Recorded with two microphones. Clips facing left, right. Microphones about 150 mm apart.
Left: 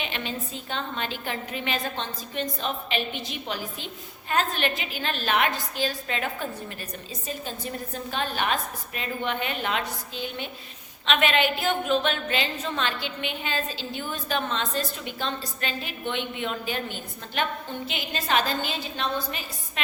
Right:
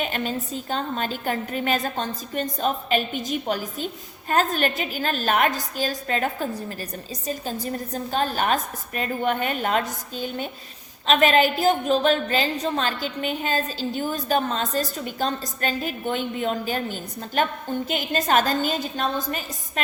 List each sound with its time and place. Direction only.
0.0 s a woman's voice: 45° right (ahead or behind)